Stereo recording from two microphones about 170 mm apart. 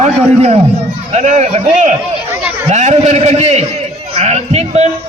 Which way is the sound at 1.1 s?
45° right (ahead or behind).